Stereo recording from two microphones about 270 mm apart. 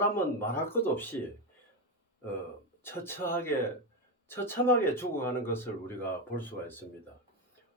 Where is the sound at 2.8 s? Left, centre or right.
Centre.